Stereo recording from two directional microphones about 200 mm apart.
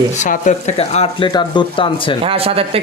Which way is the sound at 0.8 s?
30° left (ahead or behind).